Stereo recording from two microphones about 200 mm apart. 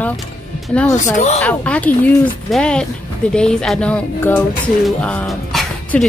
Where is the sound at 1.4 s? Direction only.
5° left (ahead or behind).